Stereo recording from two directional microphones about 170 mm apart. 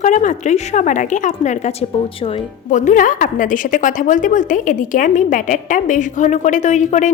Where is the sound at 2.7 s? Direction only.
50° left (ahead or behind).